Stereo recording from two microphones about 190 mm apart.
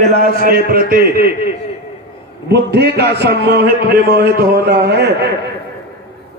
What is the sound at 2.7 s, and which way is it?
A man's voice, 55° right (ahead or behind).